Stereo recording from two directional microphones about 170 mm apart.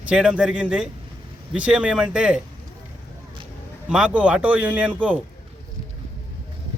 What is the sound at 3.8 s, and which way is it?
A man's voice, 5° right (ahead or behind).